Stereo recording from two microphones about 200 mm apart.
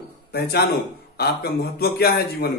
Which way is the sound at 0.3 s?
50° left (ahead or behind).